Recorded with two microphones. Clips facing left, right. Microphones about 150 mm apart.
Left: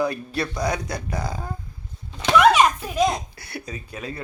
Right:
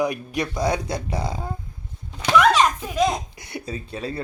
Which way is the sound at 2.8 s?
20° right (ahead or behind).